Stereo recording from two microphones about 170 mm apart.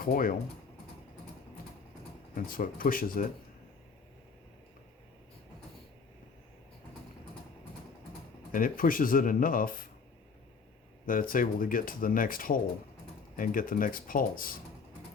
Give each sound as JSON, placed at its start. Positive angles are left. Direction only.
{"t": 0.0, "sound": "speech", "side_deg": 55}
{"t": 2.3, "sound": "speech", "side_deg": 55}
{"t": 8.5, "sound": "speech", "side_deg": 55}
{"t": 11.0, "sound": "speech", "side_deg": 55}